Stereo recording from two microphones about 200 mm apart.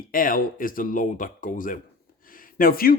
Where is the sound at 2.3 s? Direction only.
45° left (ahead or behind).